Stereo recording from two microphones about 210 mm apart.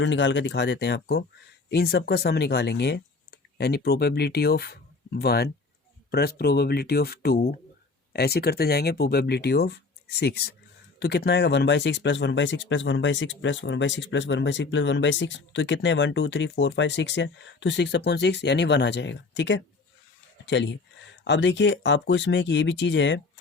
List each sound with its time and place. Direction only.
0.0 s speech: 60° left (ahead or behind)